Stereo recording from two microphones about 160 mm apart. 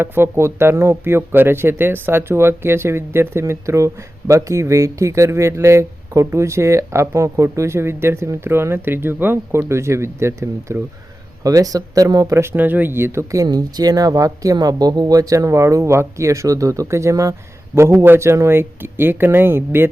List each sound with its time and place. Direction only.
0.0 s speech: 15° right (ahead or behind)